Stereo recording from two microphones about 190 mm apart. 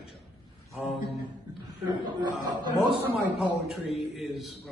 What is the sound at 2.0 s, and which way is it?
Speech, 25° right (ahead or behind).